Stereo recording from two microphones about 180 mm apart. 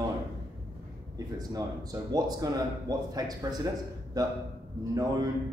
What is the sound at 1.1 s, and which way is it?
Speech, 20° right (ahead or behind).